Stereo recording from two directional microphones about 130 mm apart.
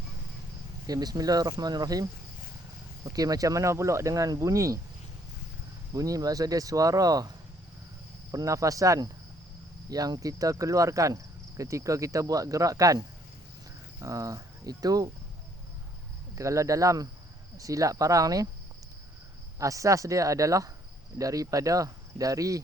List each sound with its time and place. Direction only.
0.9 s speech: 30° right (ahead or behind)
5.9 s speech: 25° right (ahead or behind)
8.3 s speech: 25° right (ahead or behind)
16.3 s speech: 25° right (ahead or behind)
19.5 s speech: 25° right (ahead or behind)